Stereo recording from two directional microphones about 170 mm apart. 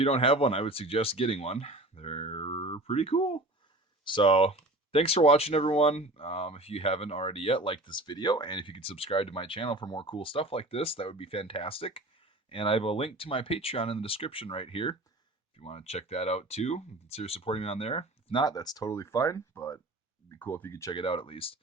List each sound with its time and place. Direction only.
0.0 s speech: 35° left (ahead or behind); by 20.9 s 15° left (ahead or behind)
20.9 s speech: 30° left (ahead or behind)